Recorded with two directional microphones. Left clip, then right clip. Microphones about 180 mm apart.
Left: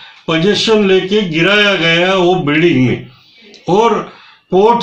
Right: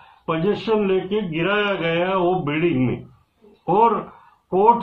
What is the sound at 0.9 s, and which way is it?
Speech, 10° left (ahead or behind).